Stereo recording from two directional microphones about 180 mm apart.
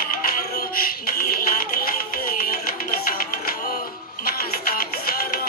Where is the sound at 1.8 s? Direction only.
55° left (ahead or behind).